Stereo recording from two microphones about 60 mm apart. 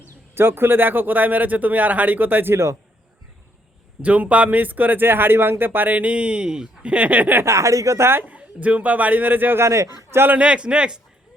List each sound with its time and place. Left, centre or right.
0.3 s speech: right
2.5 s a man's voice: right
4.0 s speech: right
7.4 s speech: right
8.0 s speech: right
8.3 s speech: right
9.6 s speech: right
10.1 s a man's voice: right
10.3 s a man's voice: centre